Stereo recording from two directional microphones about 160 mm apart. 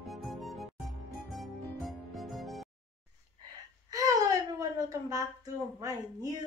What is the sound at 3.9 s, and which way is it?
Whimper, 20° right (ahead or behind).